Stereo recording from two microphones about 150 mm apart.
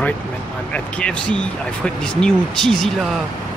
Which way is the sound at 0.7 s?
5° left (ahead or behind).